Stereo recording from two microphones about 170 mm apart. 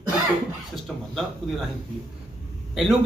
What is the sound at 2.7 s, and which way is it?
Speech, centre (ahead or behind).